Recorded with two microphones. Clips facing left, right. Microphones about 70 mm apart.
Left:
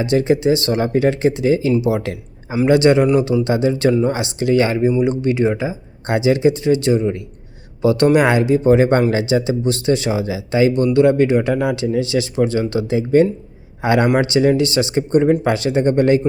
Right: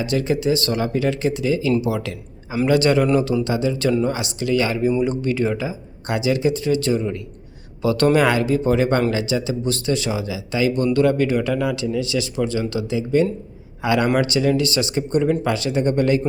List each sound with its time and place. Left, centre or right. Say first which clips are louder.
0.0 s a man's voice: left 5 dB; left